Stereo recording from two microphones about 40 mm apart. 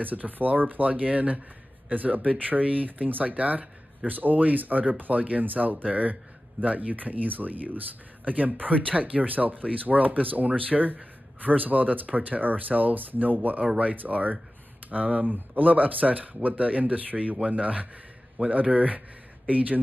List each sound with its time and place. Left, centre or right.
0.0 s speech: right